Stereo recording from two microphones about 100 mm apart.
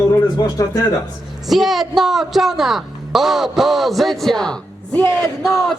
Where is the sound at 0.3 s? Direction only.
40° left (ahead or behind).